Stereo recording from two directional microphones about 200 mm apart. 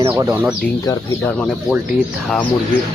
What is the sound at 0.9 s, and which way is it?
Speech, 10° left (ahead or behind).